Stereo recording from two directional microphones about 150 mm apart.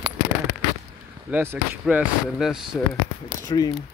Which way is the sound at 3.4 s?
25° left (ahead or behind).